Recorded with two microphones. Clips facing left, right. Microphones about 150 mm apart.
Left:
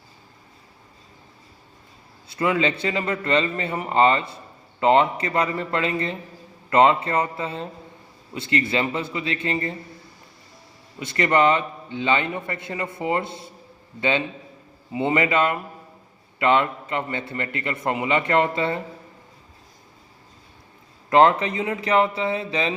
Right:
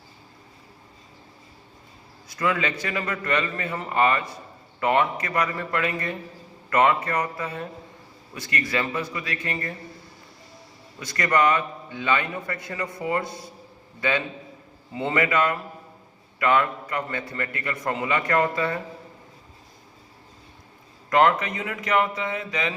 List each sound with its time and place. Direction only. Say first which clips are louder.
2.2 s a man's voice: left 3 dB; 30° left (ahead or behind)
11.0 s a man's voice: left 3 dB; 25° left (ahead or behind)
21.1 s a man's voice: left 3 dB; 30° left (ahead or behind)